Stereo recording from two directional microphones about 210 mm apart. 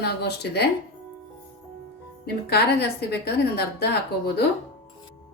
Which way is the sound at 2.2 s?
50° left (ahead or behind).